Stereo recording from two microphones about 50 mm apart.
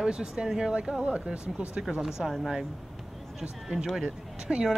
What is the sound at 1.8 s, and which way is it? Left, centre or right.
Speech, centre.